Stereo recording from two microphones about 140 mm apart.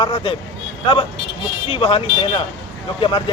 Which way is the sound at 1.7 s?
40° left (ahead or behind).